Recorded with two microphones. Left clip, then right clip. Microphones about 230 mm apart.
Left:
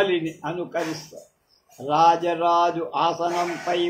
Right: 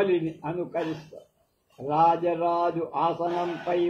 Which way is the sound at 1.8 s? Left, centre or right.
Left.